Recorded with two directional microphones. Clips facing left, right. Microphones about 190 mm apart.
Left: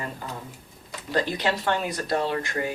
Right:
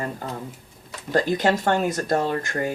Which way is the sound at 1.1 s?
45° right (ahead or behind).